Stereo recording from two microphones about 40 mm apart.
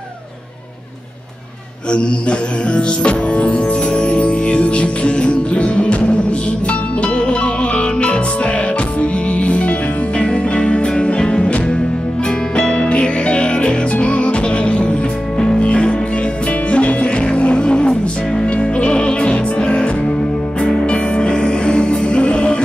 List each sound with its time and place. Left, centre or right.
1.9 s music: left